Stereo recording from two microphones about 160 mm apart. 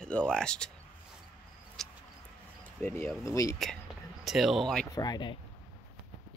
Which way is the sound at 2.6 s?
15° left (ahead or behind).